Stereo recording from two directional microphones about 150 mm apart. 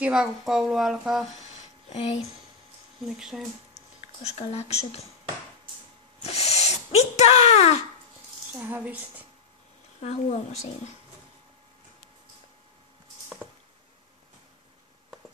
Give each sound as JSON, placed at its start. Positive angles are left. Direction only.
{"t": 0.0, "sound": "speech", "side_deg": -5}
{"t": 1.9, "sound": "a woman's voice", "side_deg": 45}
{"t": 3.0, "sound": "speech", "side_deg": -5}
{"t": 4.4, "sound": "a woman's voice", "side_deg": 45}
{"t": 6.2, "sound": "speech", "side_deg": 45}
{"t": 8.5, "sound": "speech", "side_deg": -10}
{"t": 9.9, "sound": "a woman's voice", "side_deg": 50}